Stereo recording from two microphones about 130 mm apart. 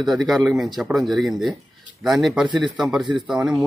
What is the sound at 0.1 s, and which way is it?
Speech, centre (ahead or behind).